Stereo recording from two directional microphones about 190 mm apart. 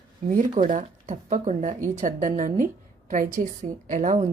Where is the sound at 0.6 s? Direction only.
40° right (ahead or behind).